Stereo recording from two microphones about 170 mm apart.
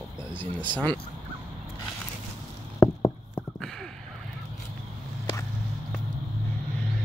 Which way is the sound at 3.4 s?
5° left (ahead or behind).